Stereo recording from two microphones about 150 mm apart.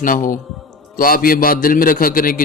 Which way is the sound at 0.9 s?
75° left (ahead or behind).